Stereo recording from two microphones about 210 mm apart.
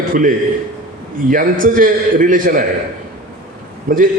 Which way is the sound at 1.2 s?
40° right (ahead or behind).